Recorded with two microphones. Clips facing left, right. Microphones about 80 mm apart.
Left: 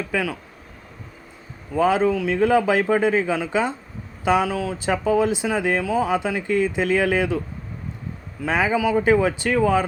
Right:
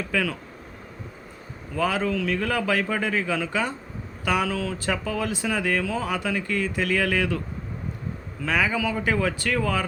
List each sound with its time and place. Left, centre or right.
0.1 s speech: centre
1.7 s speech: left
8.4 s speech: left